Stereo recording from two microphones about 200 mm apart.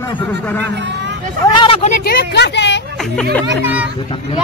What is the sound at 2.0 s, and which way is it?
Speech, 50° left (ahead or behind).